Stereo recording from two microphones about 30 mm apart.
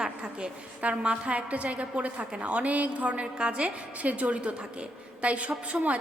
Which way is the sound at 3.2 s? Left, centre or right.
Right.